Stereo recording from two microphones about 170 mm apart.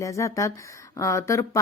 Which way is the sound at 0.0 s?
20° left (ahead or behind).